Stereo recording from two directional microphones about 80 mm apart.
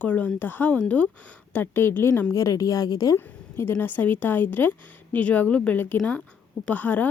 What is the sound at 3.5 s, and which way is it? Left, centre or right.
A woman's voice, left.